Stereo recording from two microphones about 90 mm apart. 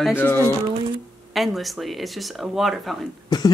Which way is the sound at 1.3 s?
Centre (ahead or behind).